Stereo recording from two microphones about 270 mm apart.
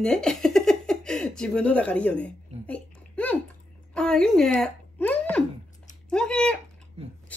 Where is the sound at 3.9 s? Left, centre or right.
Centre.